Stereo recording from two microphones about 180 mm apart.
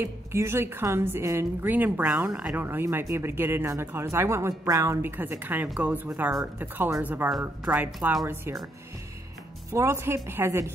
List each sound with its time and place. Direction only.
0.0 s a woman's voice: 15° right (ahead or behind)
9.7 s a woman's voice: 15° right (ahead or behind)